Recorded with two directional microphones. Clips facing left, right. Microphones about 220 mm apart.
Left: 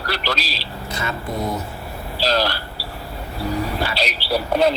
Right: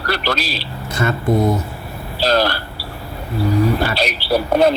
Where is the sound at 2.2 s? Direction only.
55° right (ahead or behind).